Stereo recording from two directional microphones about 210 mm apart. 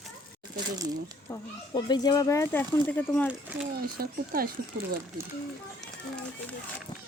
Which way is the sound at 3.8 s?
45° right (ahead or behind).